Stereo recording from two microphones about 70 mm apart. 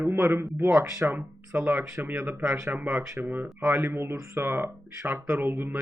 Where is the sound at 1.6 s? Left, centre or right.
Right.